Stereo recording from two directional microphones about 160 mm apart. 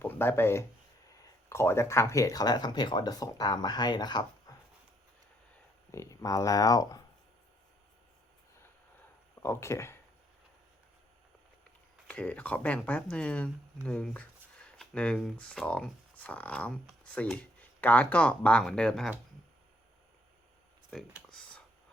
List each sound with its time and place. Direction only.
0.0 s speech: 15° left (ahead or behind)
5.9 s speech: 20° left (ahead or behind)
9.4 s speech: 15° left (ahead or behind)
12.0 s speech: 10° left (ahead or behind)